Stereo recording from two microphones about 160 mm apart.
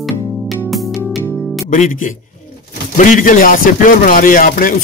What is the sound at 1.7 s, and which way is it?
A man's voice, 55° left (ahead or behind).